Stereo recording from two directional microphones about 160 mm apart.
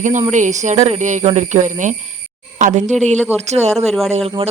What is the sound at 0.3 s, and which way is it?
Speech, 50° right (ahead or behind).